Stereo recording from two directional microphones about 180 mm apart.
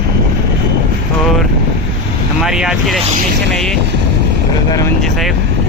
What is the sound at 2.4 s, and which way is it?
Speech, 5° right (ahead or behind).